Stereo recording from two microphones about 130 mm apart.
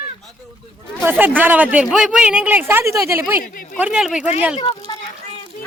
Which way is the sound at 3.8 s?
5° right (ahead or behind).